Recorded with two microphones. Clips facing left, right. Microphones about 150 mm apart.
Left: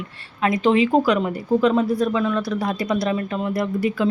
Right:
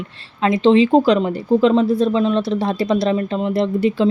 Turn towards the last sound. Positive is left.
turn(degrees=-25)  # may be behind; listen again after turning